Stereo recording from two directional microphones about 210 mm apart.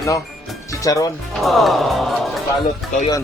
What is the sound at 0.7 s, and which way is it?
Music, 15° left (ahead or behind).